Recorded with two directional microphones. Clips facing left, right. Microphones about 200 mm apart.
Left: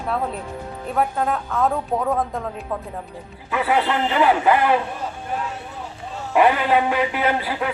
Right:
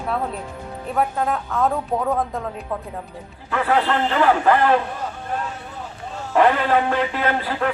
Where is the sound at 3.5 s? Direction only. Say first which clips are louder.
Right 1 dB; 10° left (ahead or behind).